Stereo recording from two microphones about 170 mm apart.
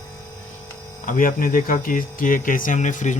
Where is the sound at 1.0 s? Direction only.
50° left (ahead or behind).